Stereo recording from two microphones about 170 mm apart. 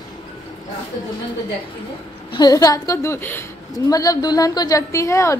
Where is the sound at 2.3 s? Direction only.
20° left (ahead or behind).